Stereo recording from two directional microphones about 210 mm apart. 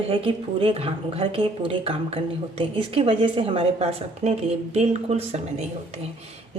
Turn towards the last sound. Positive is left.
turn(degrees=-30)  # may be behind; listen again after turning